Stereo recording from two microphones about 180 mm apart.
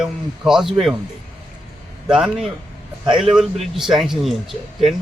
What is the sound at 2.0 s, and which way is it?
A man's voice, 5° right (ahead or behind).